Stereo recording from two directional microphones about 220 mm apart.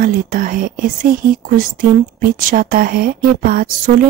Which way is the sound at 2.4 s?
40° right (ahead or behind).